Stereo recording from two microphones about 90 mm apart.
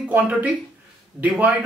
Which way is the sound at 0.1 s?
15° right (ahead or behind).